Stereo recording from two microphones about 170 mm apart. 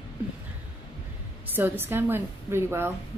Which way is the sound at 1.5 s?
10° right (ahead or behind).